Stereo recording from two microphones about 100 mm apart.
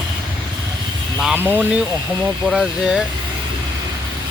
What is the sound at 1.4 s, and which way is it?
Speech, 15° right (ahead or behind).